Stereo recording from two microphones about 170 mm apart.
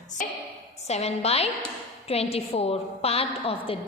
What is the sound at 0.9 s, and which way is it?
A woman's voice, 40° left (ahead or behind).